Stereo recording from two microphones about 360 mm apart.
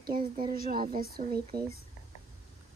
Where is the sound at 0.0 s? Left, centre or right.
Right.